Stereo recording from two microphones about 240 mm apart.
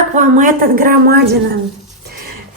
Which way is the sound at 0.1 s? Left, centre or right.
Right.